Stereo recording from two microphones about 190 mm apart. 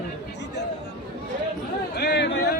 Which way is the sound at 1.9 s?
65° left (ahead or behind).